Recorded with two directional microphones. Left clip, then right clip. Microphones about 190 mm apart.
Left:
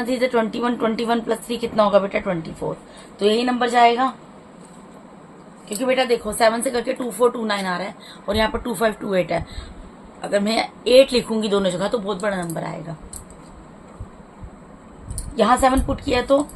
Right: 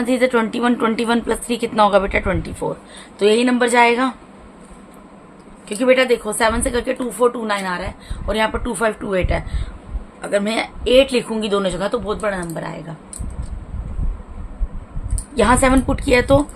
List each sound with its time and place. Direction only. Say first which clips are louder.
0.0 s a woman's voice: right 3 dB; 30° right (ahead or behind)
5.6 s a woman's voice: right 5 dB; 35° right (ahead or behind); by 12.7 s 15° right (ahead or behind)
15.4 s a woman's voice: right 2 dB; 40° right (ahead or behind)